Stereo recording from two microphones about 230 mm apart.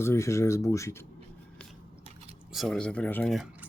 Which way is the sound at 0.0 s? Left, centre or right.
Centre.